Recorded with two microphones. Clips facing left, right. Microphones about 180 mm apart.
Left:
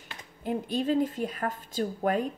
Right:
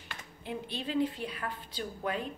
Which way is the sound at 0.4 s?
45° left (ahead or behind).